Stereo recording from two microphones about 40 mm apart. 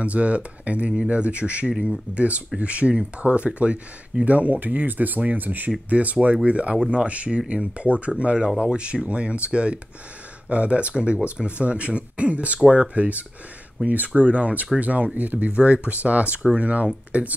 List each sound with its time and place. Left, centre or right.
0.0 s speech: right
1.7 s speech: centre
2.1 s speech: right
12.5 s speech: right
12.9 s speech: right